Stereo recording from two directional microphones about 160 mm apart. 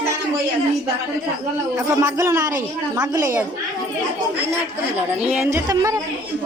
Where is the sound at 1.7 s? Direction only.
20° right (ahead or behind).